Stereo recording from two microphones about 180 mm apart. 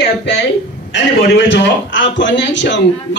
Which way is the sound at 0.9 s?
80° left.